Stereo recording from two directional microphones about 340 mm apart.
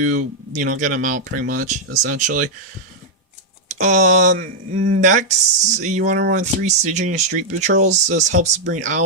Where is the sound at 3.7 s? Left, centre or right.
Right.